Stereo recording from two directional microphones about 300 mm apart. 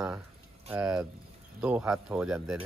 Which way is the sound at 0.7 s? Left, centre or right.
Centre.